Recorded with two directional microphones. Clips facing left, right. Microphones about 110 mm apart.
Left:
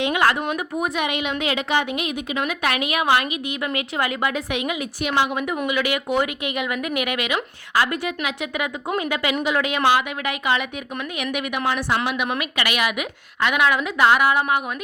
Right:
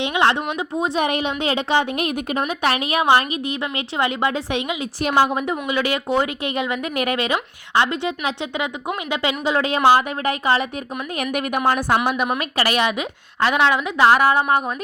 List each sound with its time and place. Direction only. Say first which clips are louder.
0.0 s a sound: right 1 dB; 25° right (ahead or behind)
0.8 s speech: right 5 dB; 35° right (ahead or behind)
2.0 s speech: right 3 dB; 45° right (ahead or behind)
2.5 s a woman's voice: right 2 dB; 30° right (ahead or behind)